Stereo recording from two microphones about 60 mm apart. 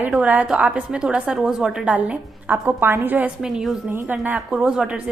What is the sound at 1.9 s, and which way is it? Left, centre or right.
A woman's voice, right.